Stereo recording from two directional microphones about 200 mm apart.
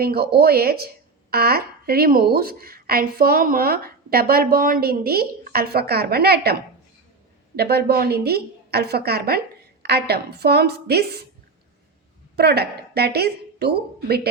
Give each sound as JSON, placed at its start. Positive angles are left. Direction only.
{"t": 0.0, "sound": "a woman's voice", "side_deg": -50}
{"t": 12.4, "sound": "a woman's voice", "side_deg": -55}